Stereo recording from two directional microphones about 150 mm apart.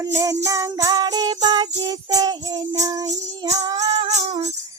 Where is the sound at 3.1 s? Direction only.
45° right (ahead or behind).